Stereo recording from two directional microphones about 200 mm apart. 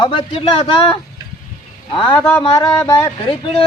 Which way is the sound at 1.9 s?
25° left (ahead or behind).